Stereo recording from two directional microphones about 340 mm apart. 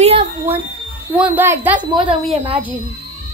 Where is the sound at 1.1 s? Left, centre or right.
Centre.